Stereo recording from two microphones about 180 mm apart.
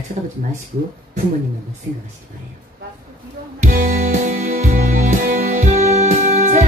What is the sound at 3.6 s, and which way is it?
Music, 50° right (ahead or behind).